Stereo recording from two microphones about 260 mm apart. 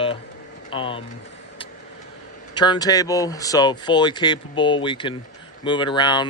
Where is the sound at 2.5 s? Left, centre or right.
Centre.